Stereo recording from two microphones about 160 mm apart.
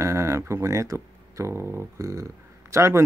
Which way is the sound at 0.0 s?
15° right (ahead or behind).